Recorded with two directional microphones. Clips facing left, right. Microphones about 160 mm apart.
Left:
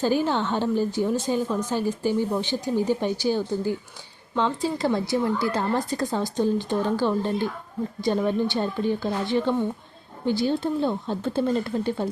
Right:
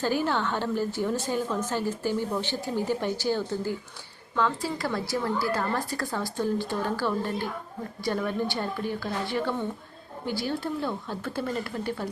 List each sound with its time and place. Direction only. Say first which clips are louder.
0.0 s a woman's voice: left 4 dB; 20° left (ahead or behind)